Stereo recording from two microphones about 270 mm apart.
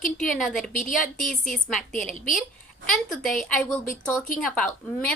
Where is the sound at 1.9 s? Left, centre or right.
Left.